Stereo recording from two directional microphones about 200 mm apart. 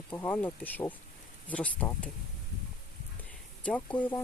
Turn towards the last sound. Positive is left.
turn(degrees=10)  # may be behind; listen again after turning